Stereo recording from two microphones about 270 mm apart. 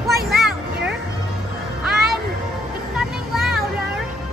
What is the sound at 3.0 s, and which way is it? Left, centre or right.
Music, centre.